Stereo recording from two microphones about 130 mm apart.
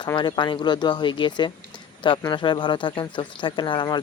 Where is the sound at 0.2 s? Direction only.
35° left (ahead or behind).